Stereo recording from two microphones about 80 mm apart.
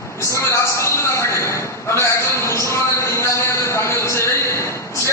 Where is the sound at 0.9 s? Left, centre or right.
Left.